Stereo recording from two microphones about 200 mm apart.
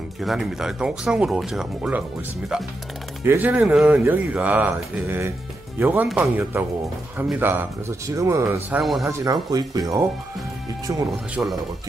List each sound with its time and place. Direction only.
0.2 s speech: centre (ahead or behind)
3.3 s speech: 10° right (ahead or behind)
8.6 s speech: 5° right (ahead or behind)
9.0 s speech: 15° right (ahead or behind)
11.1 s speech: centre (ahead or behind)